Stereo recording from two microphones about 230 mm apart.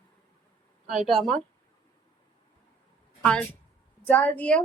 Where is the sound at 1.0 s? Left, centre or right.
Centre.